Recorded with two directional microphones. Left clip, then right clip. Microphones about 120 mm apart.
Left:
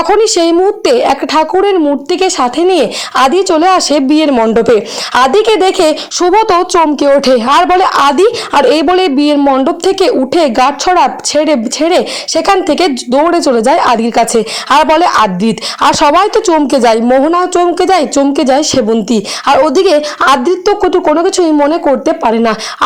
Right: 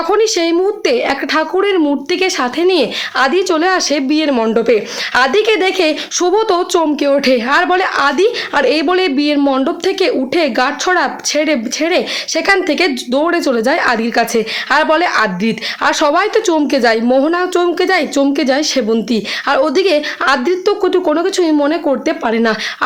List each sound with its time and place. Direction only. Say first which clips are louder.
0.1 s speech: left 4 dB; 40° left (ahead or behind)
4.3 s speech: left 5 dB; 25° left (ahead or behind)
4.5 s speech: left 4 dB; 45° left (ahead or behind)
6.1 s speech: left 5 dB; 25° left (ahead or behind)
7.0 s speech: left 5 dB; 30° left (ahead or behind)
9.4 s speech: left 5 dB; 25° left (ahead or behind)